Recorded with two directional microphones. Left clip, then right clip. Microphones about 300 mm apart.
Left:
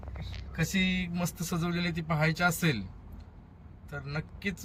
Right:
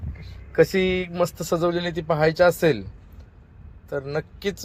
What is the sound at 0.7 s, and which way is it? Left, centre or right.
Speech, centre.